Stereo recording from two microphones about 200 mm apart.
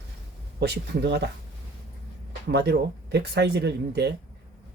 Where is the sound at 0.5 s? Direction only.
55° right (ahead or behind).